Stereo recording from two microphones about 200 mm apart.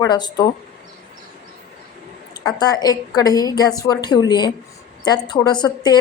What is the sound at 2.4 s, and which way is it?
Speech, 20° left (ahead or behind).